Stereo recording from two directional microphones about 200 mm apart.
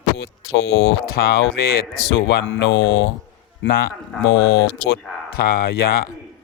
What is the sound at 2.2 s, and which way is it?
Speech, 65° left (ahead or behind).